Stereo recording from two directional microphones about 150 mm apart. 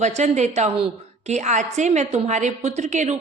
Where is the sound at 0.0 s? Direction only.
50° right (ahead or behind).